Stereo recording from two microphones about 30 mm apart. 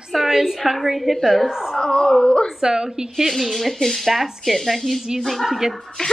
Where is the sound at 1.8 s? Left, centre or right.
Left.